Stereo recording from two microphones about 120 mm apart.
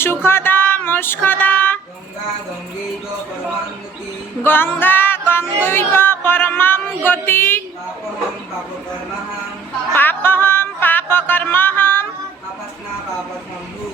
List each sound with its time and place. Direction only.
0.0 s female singing: 20° left (ahead or behind)
4.4 s music: 15° left (ahead or behind)
5.6 s a sound: 20° left (ahead or behind)
9.9 s music: 15° left (ahead or behind)